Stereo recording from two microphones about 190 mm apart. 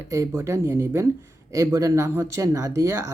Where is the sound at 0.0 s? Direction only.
15° right (ahead or behind).